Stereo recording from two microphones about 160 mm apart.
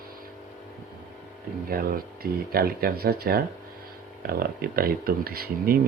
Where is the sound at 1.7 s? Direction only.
65° right (ahead or behind).